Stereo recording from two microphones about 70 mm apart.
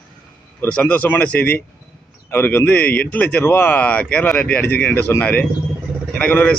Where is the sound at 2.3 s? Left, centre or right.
Left.